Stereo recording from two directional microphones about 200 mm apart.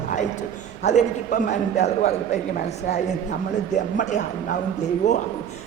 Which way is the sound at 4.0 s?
35° left (ahead or behind).